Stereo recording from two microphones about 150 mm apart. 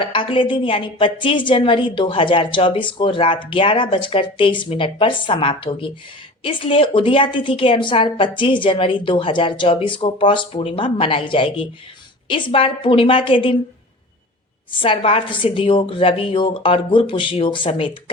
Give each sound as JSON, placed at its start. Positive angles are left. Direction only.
{"t": 0.0, "sound": "a woman's voice", "side_deg": 35}
{"t": 14.8, "sound": "a woman's voice", "side_deg": 35}